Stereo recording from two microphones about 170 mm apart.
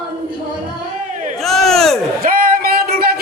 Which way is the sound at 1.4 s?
Centre (ahead or behind).